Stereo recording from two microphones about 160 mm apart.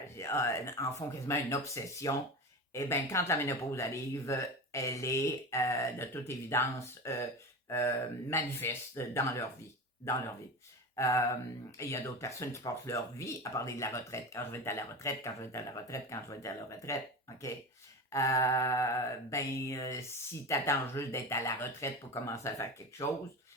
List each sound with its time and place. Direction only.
0.2 s speech: 15° left (ahead or behind)
10.9 s a sound: 20° left (ahead or behind)
11.8 s speech: 20° left (ahead or behind)
18.1 s speech: 20° left (ahead or behind)